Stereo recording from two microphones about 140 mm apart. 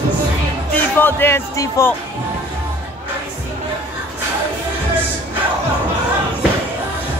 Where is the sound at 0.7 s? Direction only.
15° left (ahead or behind).